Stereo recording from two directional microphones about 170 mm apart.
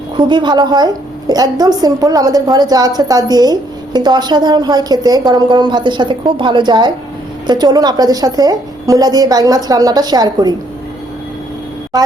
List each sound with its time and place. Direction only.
0.2 s a woman's voice: 25° right (ahead or behind)